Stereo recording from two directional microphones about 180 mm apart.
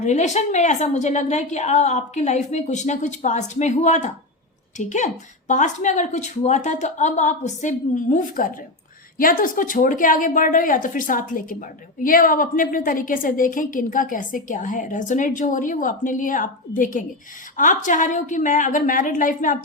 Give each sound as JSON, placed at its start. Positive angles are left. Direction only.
{"t": 0.0, "sound": "a woman's voice", "side_deg": 40}